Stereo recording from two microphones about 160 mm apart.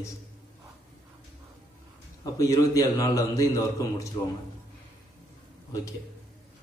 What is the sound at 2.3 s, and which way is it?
A man's voice, 20° left (ahead or behind).